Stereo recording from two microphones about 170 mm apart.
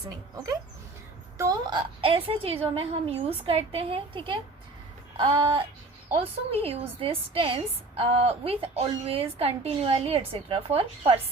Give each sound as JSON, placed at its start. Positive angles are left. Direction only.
{"t": 0.1, "sound": "a woman's voice", "side_deg": -20}